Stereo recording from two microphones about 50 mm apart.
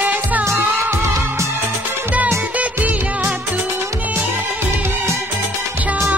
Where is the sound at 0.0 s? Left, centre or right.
Right.